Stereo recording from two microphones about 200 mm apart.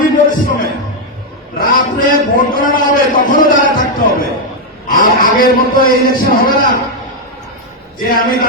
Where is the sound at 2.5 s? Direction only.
45° left (ahead or behind).